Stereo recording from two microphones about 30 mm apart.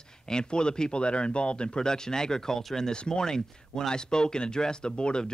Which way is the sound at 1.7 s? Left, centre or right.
Left.